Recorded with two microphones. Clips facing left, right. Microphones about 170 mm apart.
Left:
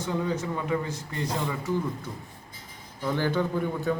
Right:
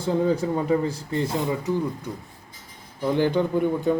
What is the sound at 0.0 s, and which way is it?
A man's voice, 35° right (ahead or behind).